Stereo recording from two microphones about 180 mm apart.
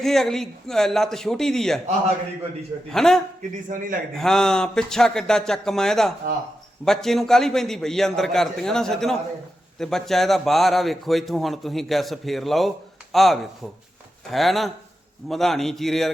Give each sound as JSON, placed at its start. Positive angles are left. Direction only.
{"t": 0.0, "sound": "a man's voice", "side_deg": 0}
{"t": 2.9, "sound": "a man's voice", "side_deg": 5}
{"t": 3.7, "sound": "a man's voice", "side_deg": -45}
{"t": 4.1, "sound": "a man's voice", "side_deg": 0}